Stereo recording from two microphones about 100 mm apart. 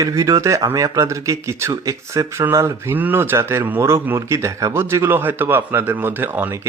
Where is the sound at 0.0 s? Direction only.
35° right (ahead or behind).